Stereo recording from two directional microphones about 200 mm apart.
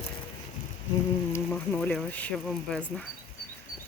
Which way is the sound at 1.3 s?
10° left (ahead or behind).